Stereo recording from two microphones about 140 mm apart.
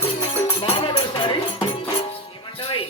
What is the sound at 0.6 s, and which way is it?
Music, 40° left (ahead or behind).